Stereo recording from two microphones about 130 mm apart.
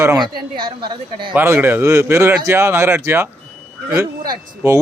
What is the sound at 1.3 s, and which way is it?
Speech, 15° right (ahead or behind).